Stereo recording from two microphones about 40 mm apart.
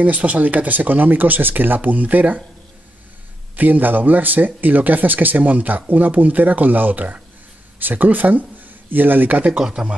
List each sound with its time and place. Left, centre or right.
0.0 s speech: right
3.5 s speech: right
9.5 s speech: centre